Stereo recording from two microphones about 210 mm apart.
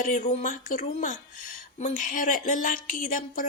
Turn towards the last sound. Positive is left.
turn(degrees=40)  # may be behind; listen again after turning